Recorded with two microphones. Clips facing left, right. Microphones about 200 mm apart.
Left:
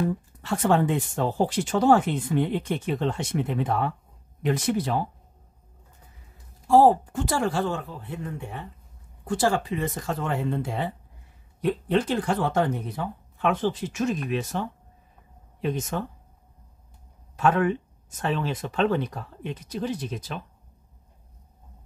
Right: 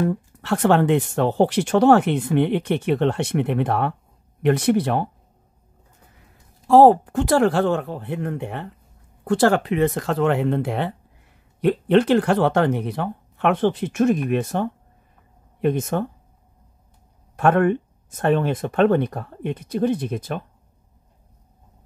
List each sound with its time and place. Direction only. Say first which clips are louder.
0.0 s speech: right 4 dB; 65° right (ahead or behind)
6.7 s speech: right 5 dB; 65° right (ahead or behind)
17.4 s speech: right 5 dB; 55° right (ahead or behind)